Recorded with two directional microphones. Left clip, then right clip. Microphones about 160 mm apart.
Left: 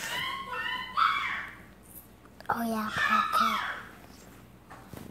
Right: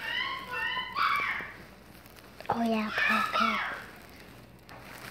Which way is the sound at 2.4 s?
5° right (ahead or behind).